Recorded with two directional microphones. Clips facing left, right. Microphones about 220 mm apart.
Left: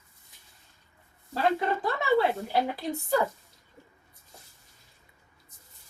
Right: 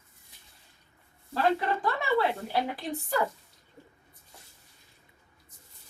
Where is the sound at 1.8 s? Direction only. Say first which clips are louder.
Left 5 dB; 20° left (ahead or behind).